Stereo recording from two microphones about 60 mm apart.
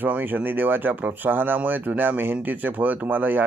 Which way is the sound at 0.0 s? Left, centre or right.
Right.